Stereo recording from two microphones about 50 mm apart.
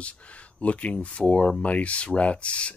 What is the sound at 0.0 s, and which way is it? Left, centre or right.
Speech, left.